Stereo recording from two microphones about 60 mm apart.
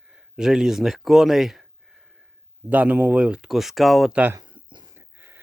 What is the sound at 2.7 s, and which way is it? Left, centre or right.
Speech, right.